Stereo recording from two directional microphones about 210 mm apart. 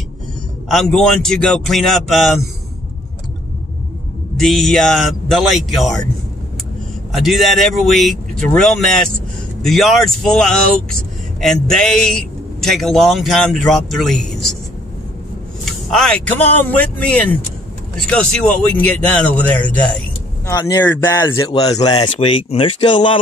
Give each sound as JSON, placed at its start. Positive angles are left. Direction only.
{"t": 0.7, "sound": "a man's voice", "side_deg": 0}
{"t": 4.4, "sound": "a man's voice", "side_deg": 0}
{"t": 7.1, "sound": "a man's voice", "side_deg": 0}
{"t": 15.9, "sound": "a man's voice", "side_deg": 5}
{"t": 20.4, "sound": "speech", "side_deg": 15}
{"t": 21.5, "sound": "speech", "side_deg": 30}